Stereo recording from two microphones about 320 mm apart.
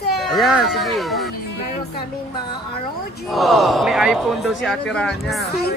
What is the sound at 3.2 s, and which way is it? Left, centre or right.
Speech, centre.